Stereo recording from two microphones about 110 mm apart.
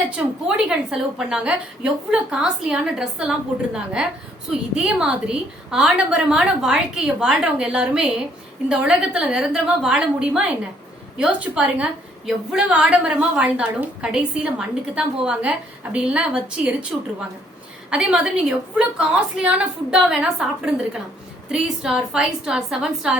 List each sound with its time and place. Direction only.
0.2 s a woman's voice: 5° right (ahead or behind)
17.9 s a woman's voice: 10° right (ahead or behind)